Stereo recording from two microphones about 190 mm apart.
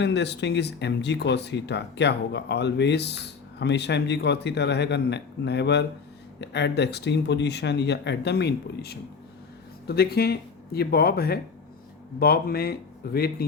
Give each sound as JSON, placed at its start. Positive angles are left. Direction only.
{"t": 0.0, "sound": "speech", "side_deg": 65}